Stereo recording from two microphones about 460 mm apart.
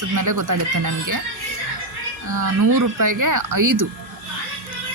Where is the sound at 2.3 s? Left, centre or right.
Right.